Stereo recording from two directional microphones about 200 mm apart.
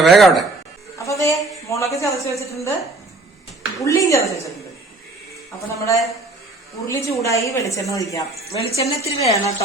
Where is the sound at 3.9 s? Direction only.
15° left (ahead or behind).